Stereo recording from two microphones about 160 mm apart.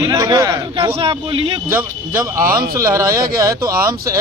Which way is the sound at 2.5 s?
70° right (ahead or behind).